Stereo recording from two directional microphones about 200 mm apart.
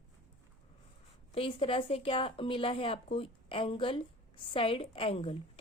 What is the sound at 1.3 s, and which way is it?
Speech, 30° left (ahead or behind).